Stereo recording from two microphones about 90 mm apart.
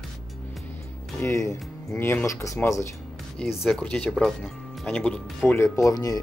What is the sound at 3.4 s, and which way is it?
Speech, centre (ahead or behind).